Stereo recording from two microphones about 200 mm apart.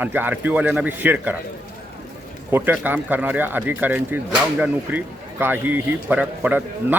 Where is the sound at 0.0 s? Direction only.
10° right (ahead or behind).